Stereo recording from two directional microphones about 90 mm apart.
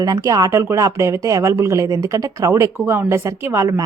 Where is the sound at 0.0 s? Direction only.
45° right (ahead or behind).